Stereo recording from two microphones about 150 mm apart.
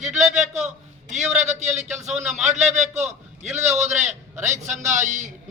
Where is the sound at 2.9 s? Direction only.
50° right (ahead or behind).